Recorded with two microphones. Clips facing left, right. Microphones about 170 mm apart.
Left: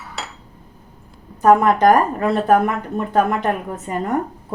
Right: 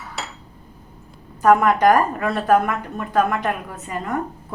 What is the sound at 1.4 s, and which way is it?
A woman's voice, 30° left (ahead or behind).